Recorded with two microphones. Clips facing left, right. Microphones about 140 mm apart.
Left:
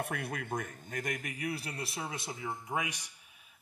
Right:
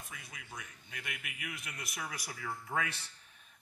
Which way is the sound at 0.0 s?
60° left (ahead or behind).